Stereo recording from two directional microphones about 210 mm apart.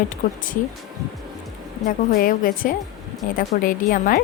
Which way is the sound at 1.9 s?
40° left (ahead or behind).